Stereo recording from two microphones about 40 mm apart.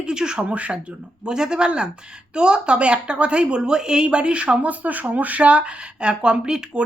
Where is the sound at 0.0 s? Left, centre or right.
Centre.